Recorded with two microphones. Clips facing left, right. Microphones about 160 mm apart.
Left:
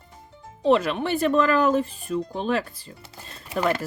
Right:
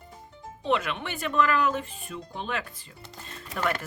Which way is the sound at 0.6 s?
35° left (ahead or behind).